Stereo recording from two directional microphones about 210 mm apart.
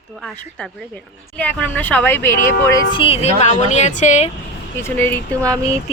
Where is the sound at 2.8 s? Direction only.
20° left (ahead or behind).